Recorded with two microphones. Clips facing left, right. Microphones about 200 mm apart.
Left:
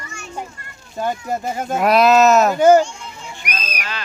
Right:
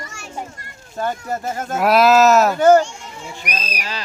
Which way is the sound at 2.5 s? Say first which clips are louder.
Left 1 dB; 10° left (ahead or behind).